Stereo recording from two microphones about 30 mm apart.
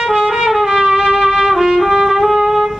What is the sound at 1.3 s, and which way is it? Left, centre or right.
Trumpet, centre.